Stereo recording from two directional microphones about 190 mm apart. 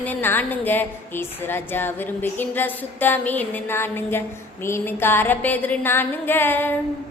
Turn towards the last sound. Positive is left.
turn(degrees=10)  # may be behind; listen again after turning